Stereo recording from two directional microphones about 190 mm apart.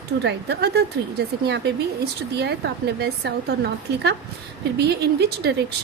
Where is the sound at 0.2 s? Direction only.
65° right (ahead or behind).